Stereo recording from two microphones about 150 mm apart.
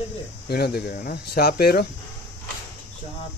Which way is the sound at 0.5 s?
90° left.